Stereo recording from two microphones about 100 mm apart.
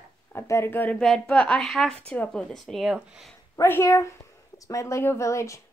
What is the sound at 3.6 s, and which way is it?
A woman's voice, 25° left (ahead or behind).